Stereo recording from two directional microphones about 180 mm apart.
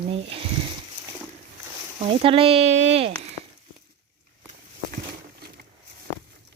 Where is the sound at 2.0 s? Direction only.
30° right (ahead or behind).